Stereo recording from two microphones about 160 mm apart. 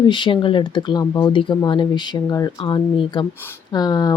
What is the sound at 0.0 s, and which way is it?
Speech, 30° left (ahead or behind).